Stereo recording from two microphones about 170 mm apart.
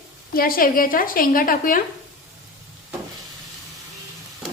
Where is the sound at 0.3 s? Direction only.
60° left (ahead or behind).